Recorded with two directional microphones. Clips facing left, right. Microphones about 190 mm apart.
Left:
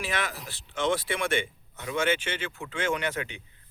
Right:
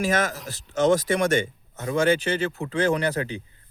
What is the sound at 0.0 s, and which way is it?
A man's voice, 45° right (ahead or behind).